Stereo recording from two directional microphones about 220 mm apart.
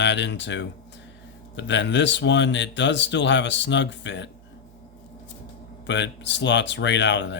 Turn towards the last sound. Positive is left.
turn(degrees=55)  # may be behind; listen again after turning